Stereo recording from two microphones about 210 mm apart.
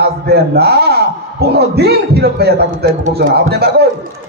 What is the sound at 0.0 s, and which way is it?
A man's voice, 50° right (ahead or behind).